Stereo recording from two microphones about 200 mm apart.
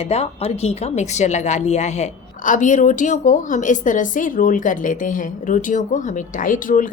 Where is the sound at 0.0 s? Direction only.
30° left (ahead or behind).